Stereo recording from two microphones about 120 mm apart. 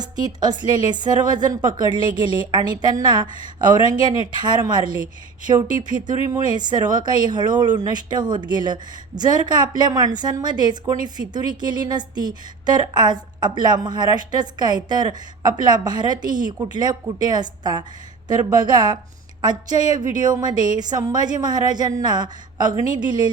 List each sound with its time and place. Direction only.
0.3 s a woman's voice: 35° right (ahead or behind)
6.3 s a woman's voice: 35° right (ahead or behind)